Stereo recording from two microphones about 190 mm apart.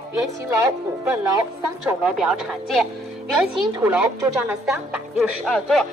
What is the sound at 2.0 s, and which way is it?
Speech, centre (ahead or behind).